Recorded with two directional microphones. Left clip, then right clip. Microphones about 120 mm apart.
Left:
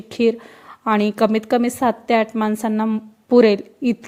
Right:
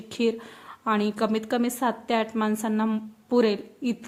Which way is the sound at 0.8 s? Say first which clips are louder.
Left 8 dB; 50° left (ahead or behind).